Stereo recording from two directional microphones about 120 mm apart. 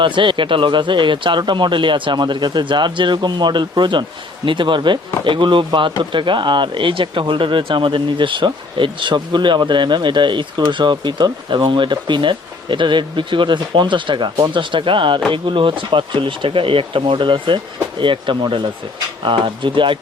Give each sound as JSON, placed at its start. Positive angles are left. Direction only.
{"t": 0.0, "sound": "speech", "side_deg": -45}